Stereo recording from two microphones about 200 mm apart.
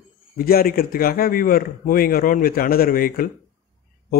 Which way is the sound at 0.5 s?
50° left (ahead or behind).